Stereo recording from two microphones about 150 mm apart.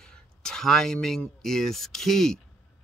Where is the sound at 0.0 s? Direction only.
5° left (ahead or behind).